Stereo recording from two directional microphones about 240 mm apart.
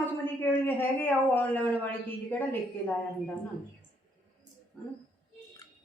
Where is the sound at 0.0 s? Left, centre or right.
Centre.